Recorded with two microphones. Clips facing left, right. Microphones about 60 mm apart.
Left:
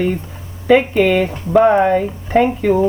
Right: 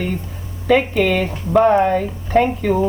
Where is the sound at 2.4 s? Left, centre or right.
Centre.